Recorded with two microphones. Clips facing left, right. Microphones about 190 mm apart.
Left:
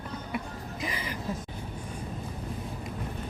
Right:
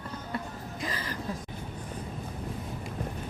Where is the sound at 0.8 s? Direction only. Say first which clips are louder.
Left 1 dB; 15° left (ahead or behind).